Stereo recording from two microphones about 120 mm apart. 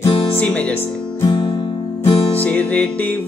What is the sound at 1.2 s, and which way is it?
Music, 35° left (ahead or behind).